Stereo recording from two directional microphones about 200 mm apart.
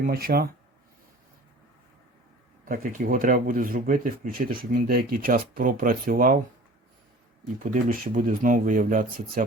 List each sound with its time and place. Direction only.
0.0 s speech: 45° right (ahead or behind)
2.6 s speech: 45° right (ahead or behind)
7.6 s speech: 40° right (ahead or behind)